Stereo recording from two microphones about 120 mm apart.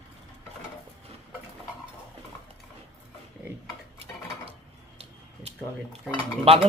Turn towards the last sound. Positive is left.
turn(degrees=-55)  # may be behind; listen again after turning